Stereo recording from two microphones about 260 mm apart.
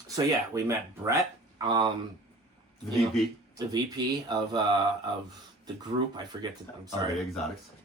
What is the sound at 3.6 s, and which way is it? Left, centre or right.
Speech, centre.